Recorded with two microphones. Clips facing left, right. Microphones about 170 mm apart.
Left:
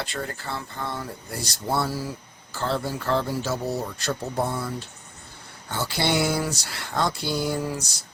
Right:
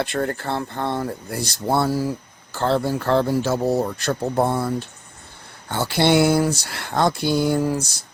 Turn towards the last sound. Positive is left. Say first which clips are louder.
# right 7 dB
turn(degrees=-50)  # may be behind; listen again after turning